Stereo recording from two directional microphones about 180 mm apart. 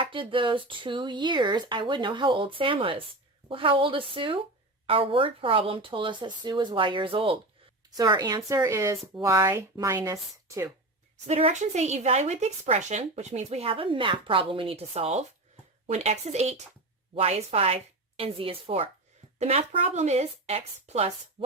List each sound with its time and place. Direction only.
0.0 s speech: 30° right (ahead or behind)
11.3 s speech: 35° right (ahead or behind)
21.4 s a sound: 30° right (ahead or behind)